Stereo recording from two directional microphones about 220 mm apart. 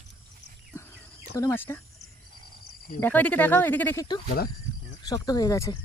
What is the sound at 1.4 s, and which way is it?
Speech, 10° left (ahead or behind).